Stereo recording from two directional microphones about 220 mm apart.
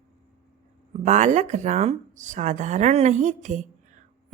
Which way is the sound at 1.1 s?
30° right (ahead or behind).